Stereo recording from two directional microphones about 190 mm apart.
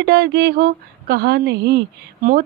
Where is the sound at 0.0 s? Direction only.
60° right (ahead or behind).